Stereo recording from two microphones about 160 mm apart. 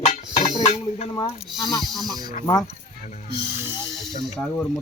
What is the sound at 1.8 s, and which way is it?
Speech, centre (ahead or behind).